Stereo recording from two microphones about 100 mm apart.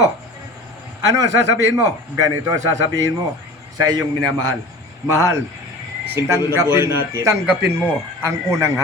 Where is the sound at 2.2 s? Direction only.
35° right (ahead or behind).